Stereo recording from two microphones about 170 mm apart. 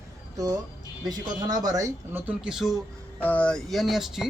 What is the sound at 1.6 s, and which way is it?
Speech, 20° right (ahead or behind).